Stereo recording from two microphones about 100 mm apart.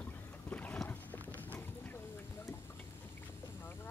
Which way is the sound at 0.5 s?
15° left (ahead or behind).